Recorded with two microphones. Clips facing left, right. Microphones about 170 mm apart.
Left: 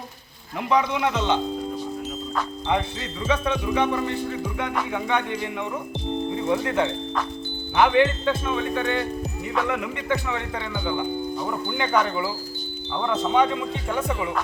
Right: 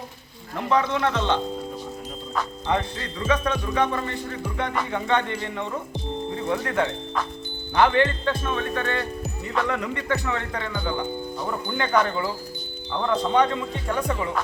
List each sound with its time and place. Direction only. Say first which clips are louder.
0.7 s speech: even; 10° left (ahead or behind)
2.6 s speech: even; 15° left (ahead or behind)